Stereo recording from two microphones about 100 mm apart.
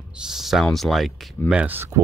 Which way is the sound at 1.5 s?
20° right (ahead or behind).